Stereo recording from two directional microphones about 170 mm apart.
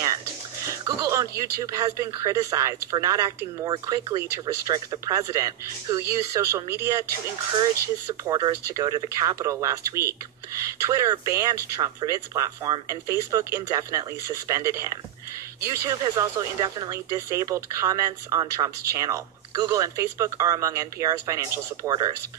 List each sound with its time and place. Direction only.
0.7 s speech: 20° right (ahead or behind)
8.1 s speech: 25° right (ahead or behind)